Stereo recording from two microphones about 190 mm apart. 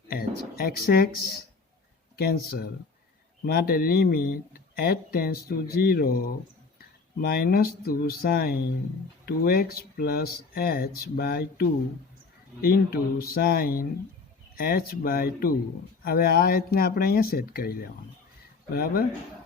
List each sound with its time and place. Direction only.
0.1 s speech: 55° left (ahead or behind)
2.1 s speech: 55° left (ahead or behind)